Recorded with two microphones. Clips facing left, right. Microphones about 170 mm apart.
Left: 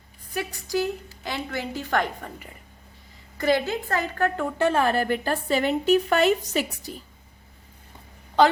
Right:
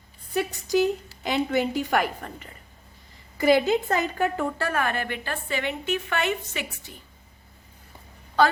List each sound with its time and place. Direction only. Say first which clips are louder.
0.3 s a woman's voice: right 4 dB; 20° right (ahead or behind)
3.3 s a woman's voice: right 3 dB; 10° right (ahead or behind)
4.5 s a woman's voice: left 5 dB; 25° left (ahead or behind)